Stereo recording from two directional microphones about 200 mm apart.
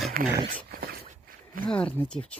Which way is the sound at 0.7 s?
45° right (ahead or behind).